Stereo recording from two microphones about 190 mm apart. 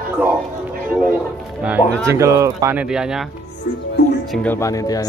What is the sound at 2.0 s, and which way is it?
Speech, 15° right (ahead or behind).